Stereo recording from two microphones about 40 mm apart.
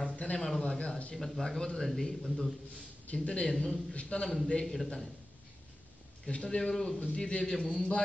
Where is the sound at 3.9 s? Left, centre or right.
Left.